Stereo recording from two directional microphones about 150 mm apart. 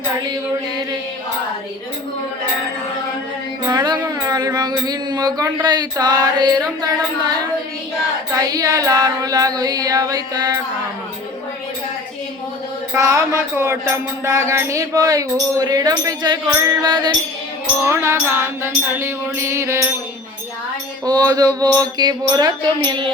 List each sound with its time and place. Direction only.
3.7 s music: 30° right (ahead or behind)
8.4 s music: 20° right (ahead or behind)
12.9 s music: 20° right (ahead or behind)
17.8 s music: 15° right (ahead or behind)
21.0 s music: 25° right (ahead or behind)